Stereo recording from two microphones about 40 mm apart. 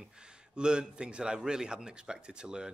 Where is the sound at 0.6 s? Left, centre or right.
Right.